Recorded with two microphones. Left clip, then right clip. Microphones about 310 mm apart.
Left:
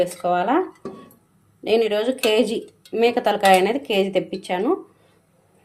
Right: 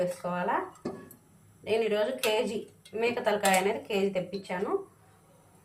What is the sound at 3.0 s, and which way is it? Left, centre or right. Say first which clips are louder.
Speech: left 10 dB; left.